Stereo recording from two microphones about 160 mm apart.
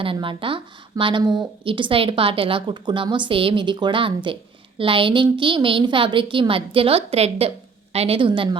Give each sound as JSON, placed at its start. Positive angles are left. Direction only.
{"t": 0.0, "sound": "speech", "side_deg": -35}